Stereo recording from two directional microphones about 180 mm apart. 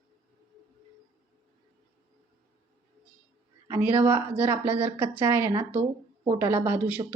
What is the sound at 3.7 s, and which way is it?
A woman's voice, 10° right (ahead or behind).